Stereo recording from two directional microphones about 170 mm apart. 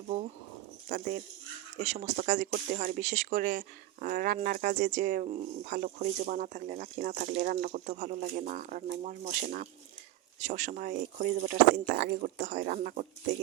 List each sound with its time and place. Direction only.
0.9 s speech: 55° right (ahead or behind)
1.8 s speech: 45° right (ahead or behind)
4.9 s speech: 60° right (ahead or behind)
5.2 s speech: 50° right (ahead or behind)